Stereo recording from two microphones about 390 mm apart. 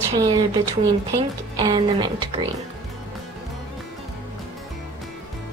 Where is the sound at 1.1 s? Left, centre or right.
Centre.